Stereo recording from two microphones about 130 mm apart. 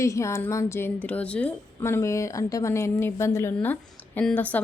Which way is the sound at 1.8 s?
20° left (ahead or behind).